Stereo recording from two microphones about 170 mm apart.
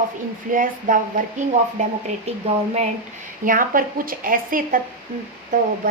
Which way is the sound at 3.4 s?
55° right (ahead or behind).